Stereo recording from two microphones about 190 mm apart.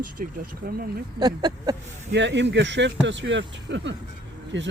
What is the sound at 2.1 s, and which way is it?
Speech, 70° right (ahead or behind).